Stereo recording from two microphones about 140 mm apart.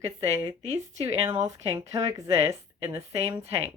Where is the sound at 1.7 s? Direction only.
20° right (ahead or behind).